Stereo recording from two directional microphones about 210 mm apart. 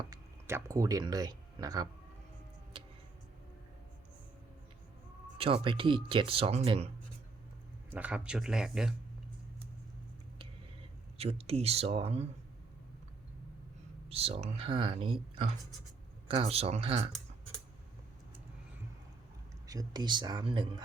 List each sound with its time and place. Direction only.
0.0 s speech: 15° right (ahead or behind)
5.6 s speech: 25° right (ahead or behind)
7.9 s speech: 5° right (ahead or behind)
11.2 s speech: 30° right (ahead or behind)
14.1 s speech: 30° right (ahead or behind)
19.6 s speech: 20° right (ahead or behind)